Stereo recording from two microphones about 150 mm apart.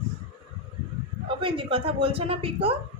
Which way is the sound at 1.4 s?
35° right (ahead or behind).